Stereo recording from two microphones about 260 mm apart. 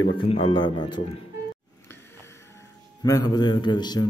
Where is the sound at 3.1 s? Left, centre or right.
Centre.